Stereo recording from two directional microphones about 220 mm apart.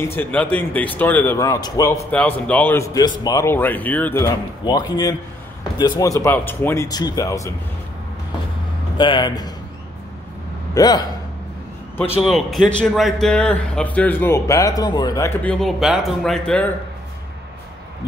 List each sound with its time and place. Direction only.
0.0 s speech: 10° left (ahead or behind)
8.9 s speech: 20° left (ahead or behind)
10.7 s a man's voice: 15° left (ahead or behind)
12.2 s a man's voice: centre (ahead or behind)